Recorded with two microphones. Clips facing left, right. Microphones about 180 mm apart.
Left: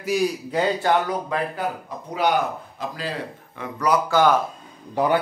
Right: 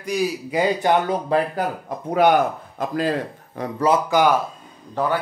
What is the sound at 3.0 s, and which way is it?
Speech, 45° right (ahead or behind).